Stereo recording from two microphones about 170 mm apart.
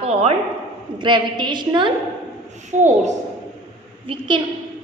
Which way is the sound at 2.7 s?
45° right (ahead or behind).